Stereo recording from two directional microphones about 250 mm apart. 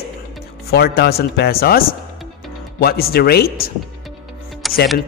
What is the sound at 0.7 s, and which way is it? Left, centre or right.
Speech, left.